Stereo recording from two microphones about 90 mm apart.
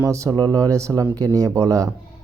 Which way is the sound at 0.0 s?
35° right (ahead or behind).